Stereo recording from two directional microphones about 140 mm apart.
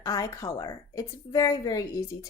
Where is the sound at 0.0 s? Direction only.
25° left (ahead or behind).